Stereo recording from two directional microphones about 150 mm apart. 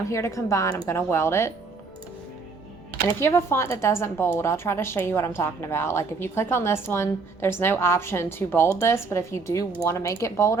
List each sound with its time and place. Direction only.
0.1 s speech: 20° left (ahead or behind)
3.2 s a woman's voice: 15° left (ahead or behind)